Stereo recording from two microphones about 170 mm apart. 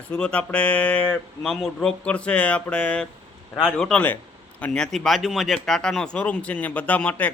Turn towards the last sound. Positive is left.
turn(degrees=10)  # may be behind; listen again after turning